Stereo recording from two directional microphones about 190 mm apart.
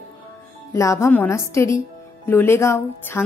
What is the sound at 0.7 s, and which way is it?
Speech, 15° left (ahead or behind).